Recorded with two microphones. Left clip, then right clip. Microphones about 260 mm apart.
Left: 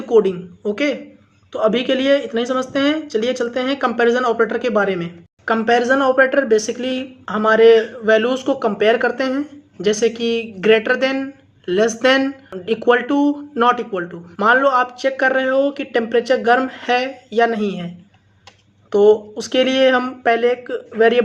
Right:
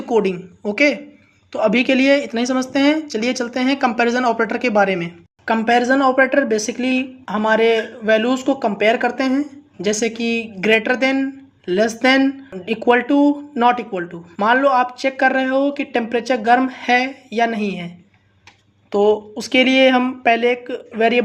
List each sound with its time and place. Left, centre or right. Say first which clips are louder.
0.1 s a woman's voice: left 3 dB; centre
18.9 s a woman's voice: left 3 dB; centre